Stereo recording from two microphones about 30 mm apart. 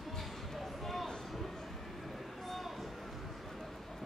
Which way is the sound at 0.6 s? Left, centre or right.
Centre.